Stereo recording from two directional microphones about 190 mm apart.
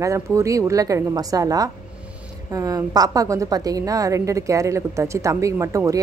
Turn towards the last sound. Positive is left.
turn(degrees=-15)  # may be behind; listen again after turning